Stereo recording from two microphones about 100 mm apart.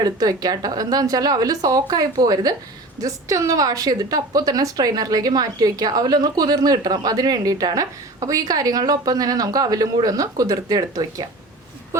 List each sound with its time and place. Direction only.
0.0 s a woman's voice: 40° right (ahead or behind)